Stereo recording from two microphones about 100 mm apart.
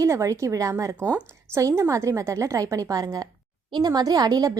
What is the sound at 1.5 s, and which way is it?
A woman's voice, 30° right (ahead or behind).